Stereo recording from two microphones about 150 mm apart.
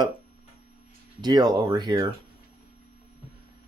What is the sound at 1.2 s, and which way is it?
Speech, 30° right (ahead or behind).